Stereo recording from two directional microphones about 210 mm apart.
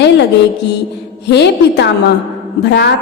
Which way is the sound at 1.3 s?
55° left (ahead or behind).